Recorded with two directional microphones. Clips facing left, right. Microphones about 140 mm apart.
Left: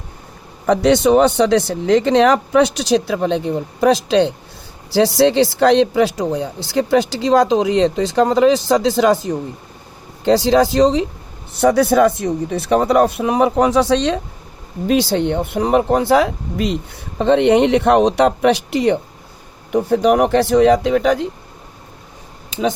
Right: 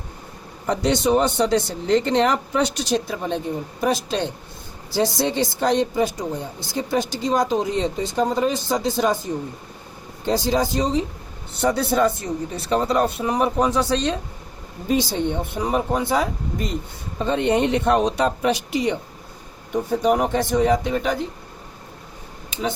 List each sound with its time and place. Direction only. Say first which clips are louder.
0.7 s speech: left 7 dB; 90° left